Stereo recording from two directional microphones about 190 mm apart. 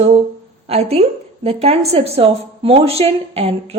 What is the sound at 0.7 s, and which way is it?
Speech, 35° right (ahead or behind).